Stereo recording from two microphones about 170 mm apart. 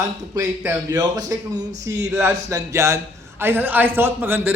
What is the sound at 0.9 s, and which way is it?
A man's voice, 20° right (ahead or behind).